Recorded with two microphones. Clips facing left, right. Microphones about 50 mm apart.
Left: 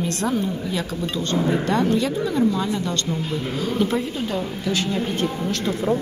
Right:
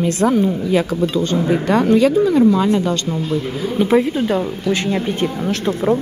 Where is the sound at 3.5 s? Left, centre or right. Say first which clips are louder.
Right 1 dB; centre.